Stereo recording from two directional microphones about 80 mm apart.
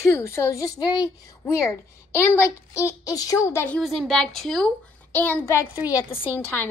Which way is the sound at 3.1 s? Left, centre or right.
Left.